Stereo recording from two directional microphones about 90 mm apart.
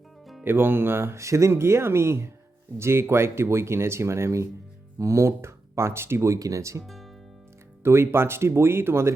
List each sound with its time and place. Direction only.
0.4 s speech: 25° right (ahead or behind)
6.8 s music: centre (ahead or behind)
7.9 s speech: 30° right (ahead or behind)